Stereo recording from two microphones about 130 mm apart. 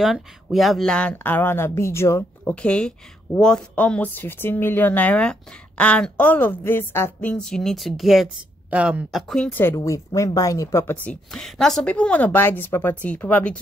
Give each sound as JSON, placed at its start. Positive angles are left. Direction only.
{"t": 0.0, "sound": "speech", "side_deg": 0}
{"t": 2.5, "sound": "speech", "side_deg": 10}
{"t": 9.3, "sound": "speech", "side_deg": 10}
{"t": 9.8, "sound": "speech", "side_deg": 25}
{"t": 11.3, "sound": "speech", "side_deg": 5}